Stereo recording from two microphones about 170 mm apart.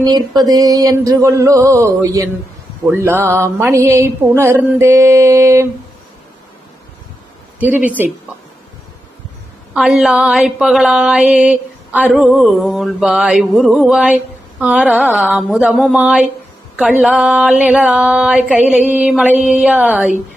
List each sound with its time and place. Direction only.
0.0 s a sound: 20° right (ahead or behind)
2.8 s mantra: 15° right (ahead or behind)
7.6 s mantra: 10° right (ahead or behind)
9.7 s mantra: centre (ahead or behind)